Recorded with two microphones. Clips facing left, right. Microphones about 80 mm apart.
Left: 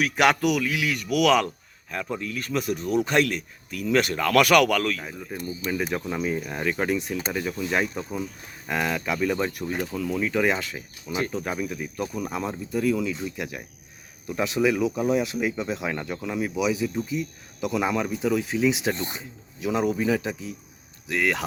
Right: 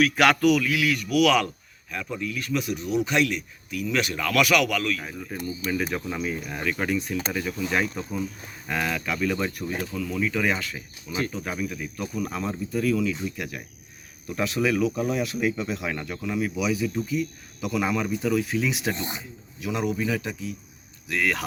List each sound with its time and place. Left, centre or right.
0.0 s speech: centre
1.9 s speech: left
5.0 s speech: centre
6.2 s speech: left
18.9 s speech: centre
19.5 s speech: left